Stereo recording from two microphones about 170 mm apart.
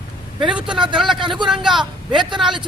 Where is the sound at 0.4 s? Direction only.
5° right (ahead or behind).